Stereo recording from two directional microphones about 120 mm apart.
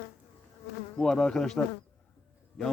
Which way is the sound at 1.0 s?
5° left (ahead or behind).